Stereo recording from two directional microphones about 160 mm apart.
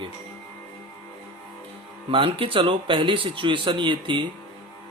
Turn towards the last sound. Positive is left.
turn(degrees=-30)  # may be behind; listen again after turning